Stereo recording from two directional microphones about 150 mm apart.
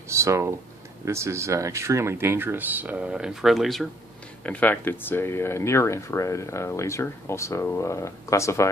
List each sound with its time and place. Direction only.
0.1 s speech: 20° right (ahead or behind); by 8.6 s 20° left (ahead or behind)